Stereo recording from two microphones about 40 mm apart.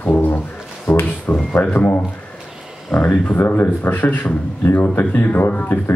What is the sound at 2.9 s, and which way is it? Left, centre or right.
Speech, left.